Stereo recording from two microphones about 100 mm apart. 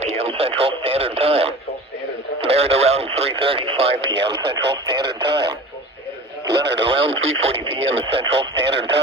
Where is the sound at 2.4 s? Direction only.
85° right.